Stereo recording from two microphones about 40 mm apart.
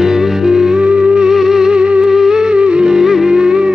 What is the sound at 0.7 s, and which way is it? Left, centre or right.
Music, right.